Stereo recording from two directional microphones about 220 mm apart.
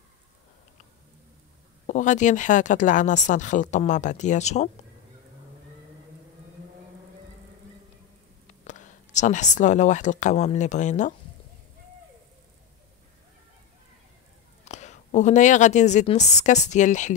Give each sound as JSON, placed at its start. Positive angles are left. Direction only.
{"t": 1.9, "sound": "speech", "side_deg": 35}
{"t": 8.5, "sound": "speech", "side_deg": 35}
{"t": 14.6, "sound": "a woman's voice", "side_deg": 30}